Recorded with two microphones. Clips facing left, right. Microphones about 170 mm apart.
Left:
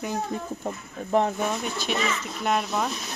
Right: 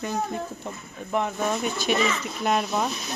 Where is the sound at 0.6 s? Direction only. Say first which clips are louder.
Left 3 dB; 35° left (ahead or behind).